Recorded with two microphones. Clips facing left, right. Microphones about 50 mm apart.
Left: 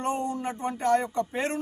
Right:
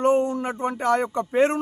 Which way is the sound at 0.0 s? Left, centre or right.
Right.